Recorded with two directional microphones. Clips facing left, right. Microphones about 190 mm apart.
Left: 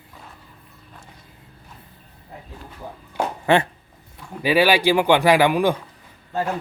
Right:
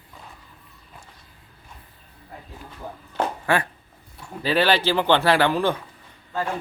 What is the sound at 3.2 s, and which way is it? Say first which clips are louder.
Dog: even; 10° left (ahead or behind).